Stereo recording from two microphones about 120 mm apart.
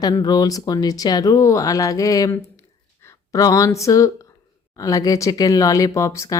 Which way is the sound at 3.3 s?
30° left (ahead or behind).